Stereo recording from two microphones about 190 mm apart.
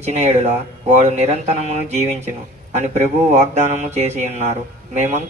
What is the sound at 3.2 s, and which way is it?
Speech, 35° right (ahead or behind).